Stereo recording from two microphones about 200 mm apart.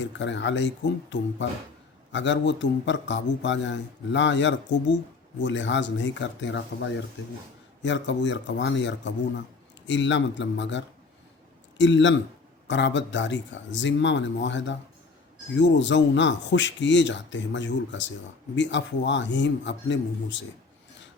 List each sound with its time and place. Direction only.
0.0 s a man's voice: 65° left (ahead or behind)